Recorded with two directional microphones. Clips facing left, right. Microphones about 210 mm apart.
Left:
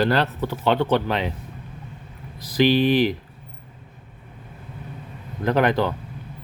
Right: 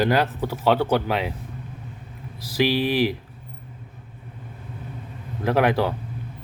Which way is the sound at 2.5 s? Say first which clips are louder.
Left 3 dB; 5° right (ahead or behind).